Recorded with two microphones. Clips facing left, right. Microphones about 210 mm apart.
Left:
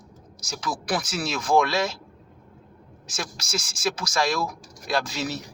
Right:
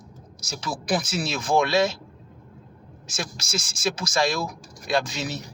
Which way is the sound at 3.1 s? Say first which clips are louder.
Right 1 dB; 20° right (ahead or behind).